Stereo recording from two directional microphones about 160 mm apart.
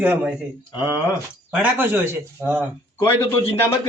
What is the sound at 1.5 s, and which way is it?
A man's voice, 10° right (ahead or behind).